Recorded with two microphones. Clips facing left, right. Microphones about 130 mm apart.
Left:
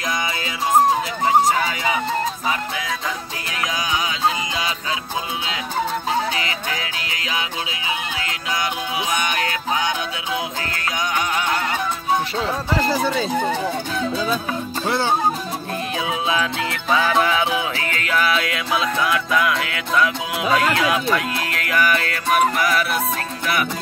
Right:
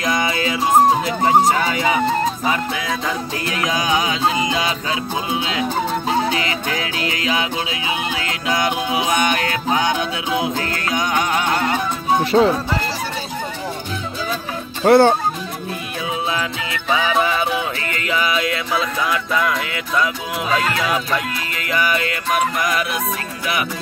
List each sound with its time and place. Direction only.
0.0 s music: 60° right (ahead or behind)
1.2 s speech: 55° right (ahead or behind)
3.7 s music: 45° right (ahead or behind)
9.1 s music: 50° right (ahead or behind)
11.5 s music: 25° right (ahead or behind)
12.3 s music: 55° right (ahead or behind)
14.9 s speech: 55° right (ahead or behind)
16.9 s music: 5° right (ahead or behind)
22.3 s music: 5° left (ahead or behind)